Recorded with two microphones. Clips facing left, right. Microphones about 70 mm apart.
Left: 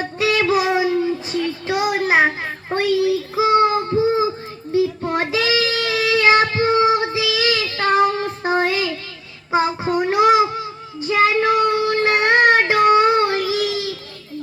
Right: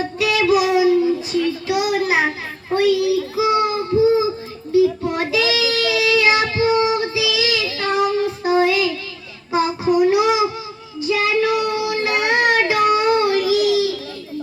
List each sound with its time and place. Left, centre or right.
0.2 s child singing: left